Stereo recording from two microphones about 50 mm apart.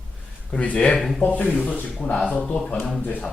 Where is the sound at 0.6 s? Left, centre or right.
Left.